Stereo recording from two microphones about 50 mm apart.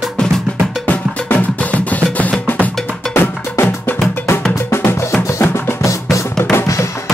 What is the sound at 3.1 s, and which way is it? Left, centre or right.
Music, left.